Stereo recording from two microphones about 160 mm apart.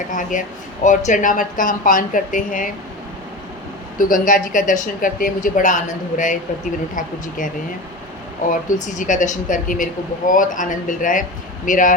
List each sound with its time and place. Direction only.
0.1 s speech: 55° left (ahead or behind)
3.9 s speech: 55° left (ahead or behind)
8.8 s speech: 50° left (ahead or behind)